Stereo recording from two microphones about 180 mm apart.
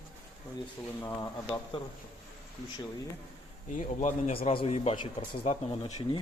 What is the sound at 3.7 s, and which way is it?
A man's voice, 45° left (ahead or behind).